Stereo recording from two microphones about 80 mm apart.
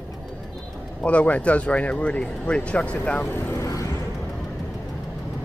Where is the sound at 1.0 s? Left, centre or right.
Centre.